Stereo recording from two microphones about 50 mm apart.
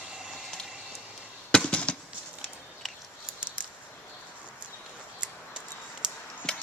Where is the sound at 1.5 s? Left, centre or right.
Left.